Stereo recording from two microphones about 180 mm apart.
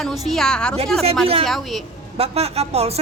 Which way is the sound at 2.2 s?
35° right (ahead or behind).